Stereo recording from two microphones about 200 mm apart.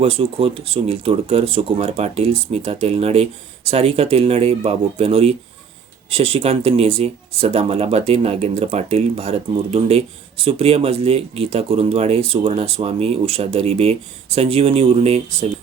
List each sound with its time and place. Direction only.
0.0 s speech: 30° right (ahead or behind)